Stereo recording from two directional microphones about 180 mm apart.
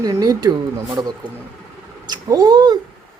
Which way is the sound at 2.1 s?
20° right (ahead or behind).